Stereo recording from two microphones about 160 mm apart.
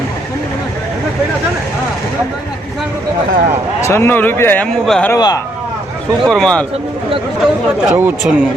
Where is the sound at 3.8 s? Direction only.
15° left (ahead or behind).